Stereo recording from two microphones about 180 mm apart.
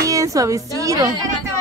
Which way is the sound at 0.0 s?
20° right (ahead or behind).